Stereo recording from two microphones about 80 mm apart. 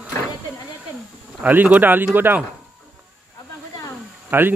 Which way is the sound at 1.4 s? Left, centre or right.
Right.